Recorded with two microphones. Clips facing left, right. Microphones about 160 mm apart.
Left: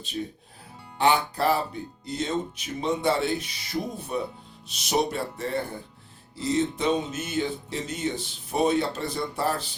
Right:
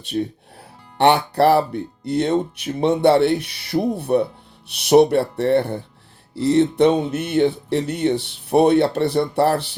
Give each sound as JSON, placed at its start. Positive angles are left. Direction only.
{"t": 0.0, "sound": "speech", "side_deg": -65}